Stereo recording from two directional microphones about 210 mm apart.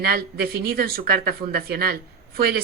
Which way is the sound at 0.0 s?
50° right (ahead or behind).